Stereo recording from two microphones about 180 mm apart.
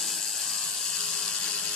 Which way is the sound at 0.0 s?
Centre (ahead or behind).